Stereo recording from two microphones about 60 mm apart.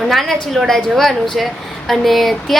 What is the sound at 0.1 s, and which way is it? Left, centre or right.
Speech, centre.